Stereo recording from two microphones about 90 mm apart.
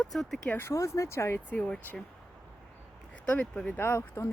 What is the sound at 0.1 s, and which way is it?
Speech, centre (ahead or behind).